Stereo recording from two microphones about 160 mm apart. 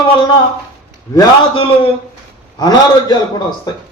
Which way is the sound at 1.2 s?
30° left (ahead or behind).